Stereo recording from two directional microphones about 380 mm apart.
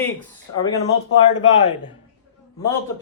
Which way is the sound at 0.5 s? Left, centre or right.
Left.